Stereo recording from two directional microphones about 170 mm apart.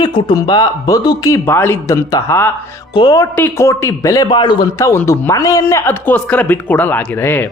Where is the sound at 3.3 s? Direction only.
15° left (ahead or behind).